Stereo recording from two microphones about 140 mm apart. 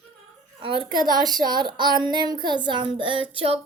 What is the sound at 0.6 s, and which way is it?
Speech, 40° right (ahead or behind).